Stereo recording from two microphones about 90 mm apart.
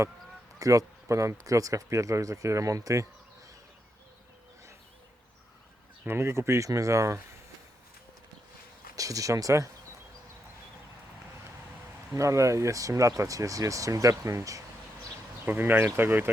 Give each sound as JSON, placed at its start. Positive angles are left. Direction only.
{"t": 0.6, "sound": "speech", "side_deg": -40}
{"t": 6.1, "sound": "speech", "side_deg": -30}
{"t": 9.0, "sound": "speech", "side_deg": -40}
{"t": 12.1, "sound": "speech", "side_deg": -35}
{"t": 15.4, "sound": "speech", "side_deg": -20}